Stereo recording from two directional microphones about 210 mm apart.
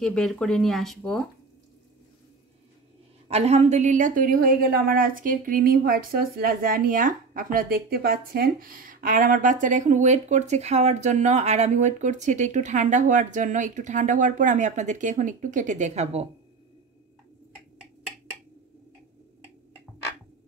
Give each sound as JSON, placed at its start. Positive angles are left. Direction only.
{"t": 0.0, "sound": "speech", "side_deg": 0}
{"t": 3.3, "sound": "a woman's voice", "side_deg": -30}